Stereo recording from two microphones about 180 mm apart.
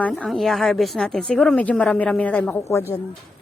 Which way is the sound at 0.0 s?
5° left (ahead or behind).